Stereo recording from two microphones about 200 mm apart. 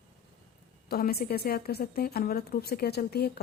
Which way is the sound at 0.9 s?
50° left (ahead or behind).